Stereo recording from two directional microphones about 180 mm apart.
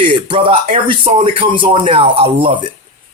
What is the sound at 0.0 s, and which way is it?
Speech, 30° right (ahead or behind).